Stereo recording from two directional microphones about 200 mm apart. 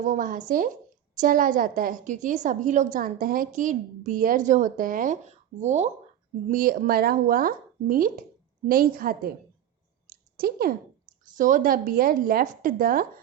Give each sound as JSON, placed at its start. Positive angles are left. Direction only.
{"t": 0.0, "sound": "a woman's voice", "side_deg": -40}
{"t": 10.1, "sound": "clicking", "side_deg": -50}
{"t": 11.3, "sound": "speech", "side_deg": -40}